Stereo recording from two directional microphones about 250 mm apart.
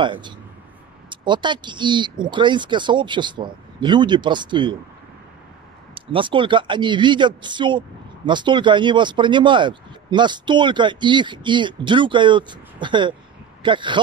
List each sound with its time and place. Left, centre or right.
0.0 s speech: centre
5.9 s speech: centre